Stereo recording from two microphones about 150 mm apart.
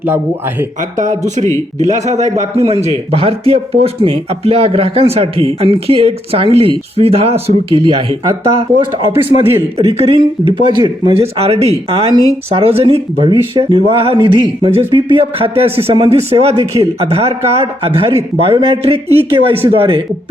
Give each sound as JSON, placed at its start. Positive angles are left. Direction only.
{"t": 1.9, "sound": "a man's voice", "side_deg": -50}
{"t": 9.1, "sound": "speech", "side_deg": -15}
{"t": 9.7, "sound": "speech", "side_deg": -40}